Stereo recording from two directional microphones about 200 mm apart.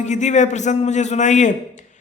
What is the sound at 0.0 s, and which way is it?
Speech, 35° left (ahead or behind).